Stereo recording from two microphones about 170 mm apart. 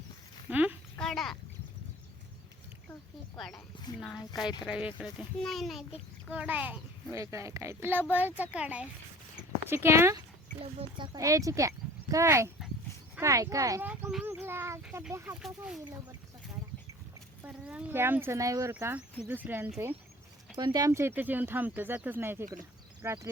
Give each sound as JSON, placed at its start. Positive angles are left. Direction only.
{"t": 0.5, "sound": "speech", "side_deg": -10}
{"t": 0.9, "sound": "a sound", "side_deg": 5}
{"t": 3.3, "sound": "a child's voice", "side_deg": 0}
{"t": 4.6, "sound": "a child's voice", "side_deg": -5}
{"t": 10.6, "sound": "speech", "side_deg": -30}
{"t": 15.4, "sound": "a child's voice", "side_deg": -5}
{"t": 17.4, "sound": "speech", "side_deg": -10}
{"t": 20.6, "sound": "speech", "side_deg": -25}